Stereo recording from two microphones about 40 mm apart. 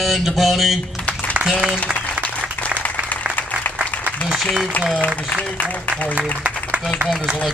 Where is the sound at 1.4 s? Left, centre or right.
Right.